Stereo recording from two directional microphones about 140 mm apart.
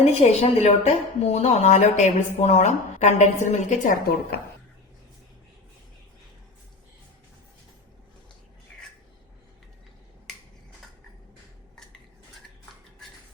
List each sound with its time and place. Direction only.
0.0 s speech: 50° left (ahead or behind)